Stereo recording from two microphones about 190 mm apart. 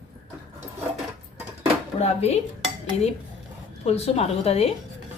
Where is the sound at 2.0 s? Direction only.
35° left (ahead or behind).